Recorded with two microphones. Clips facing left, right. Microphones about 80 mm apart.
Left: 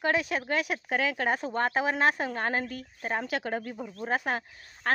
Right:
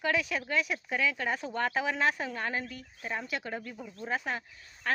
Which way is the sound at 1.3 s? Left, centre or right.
Left.